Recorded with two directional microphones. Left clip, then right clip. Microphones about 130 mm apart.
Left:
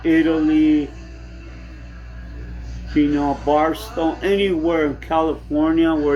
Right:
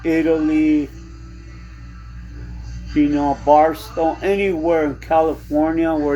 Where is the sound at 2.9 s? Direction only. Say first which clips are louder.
Right 1 dB; 40° right (ahead or behind).